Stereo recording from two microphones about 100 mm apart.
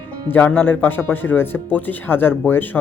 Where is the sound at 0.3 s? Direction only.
15° left (ahead or behind).